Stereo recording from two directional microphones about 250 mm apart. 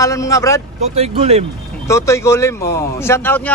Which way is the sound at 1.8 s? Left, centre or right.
Centre.